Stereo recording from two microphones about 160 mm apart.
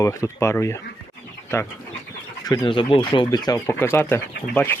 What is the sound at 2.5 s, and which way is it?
Speech, 30° left (ahead or behind).